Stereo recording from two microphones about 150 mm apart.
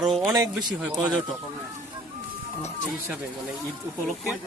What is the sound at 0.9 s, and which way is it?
Speech, 25° right (ahead or behind).